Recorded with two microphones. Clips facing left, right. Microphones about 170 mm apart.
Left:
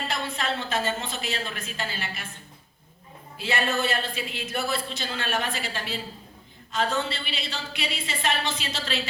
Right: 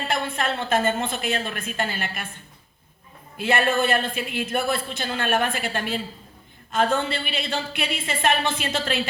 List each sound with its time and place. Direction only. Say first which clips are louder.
0.1 s a man's voice: right 7 dB; 55° right (ahead or behind)
3.3 s a man's voice: right 5 dB; 55° right (ahead or behind)